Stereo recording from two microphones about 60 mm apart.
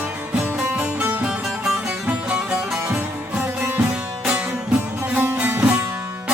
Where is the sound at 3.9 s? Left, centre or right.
Right.